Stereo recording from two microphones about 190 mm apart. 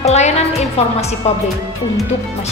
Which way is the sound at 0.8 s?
35° left (ahead or behind).